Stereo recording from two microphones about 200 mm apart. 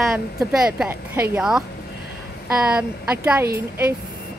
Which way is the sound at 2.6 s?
5° right (ahead or behind).